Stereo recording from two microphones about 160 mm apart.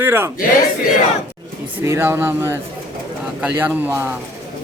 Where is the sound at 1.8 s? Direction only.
15° right (ahead or behind).